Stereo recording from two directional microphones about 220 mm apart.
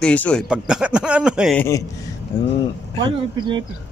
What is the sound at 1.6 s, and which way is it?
Speech, 15° left (ahead or behind).